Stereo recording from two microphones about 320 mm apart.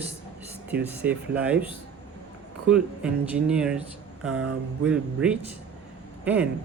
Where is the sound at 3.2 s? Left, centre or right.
Centre.